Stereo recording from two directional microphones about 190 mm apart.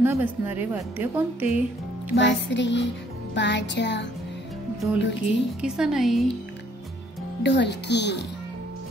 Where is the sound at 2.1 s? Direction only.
70° left (ahead or behind).